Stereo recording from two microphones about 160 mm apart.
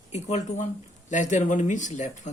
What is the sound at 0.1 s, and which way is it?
A man's voice, 45° left (ahead or behind).